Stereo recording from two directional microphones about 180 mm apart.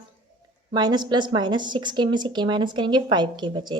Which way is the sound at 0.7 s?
25° right (ahead or behind).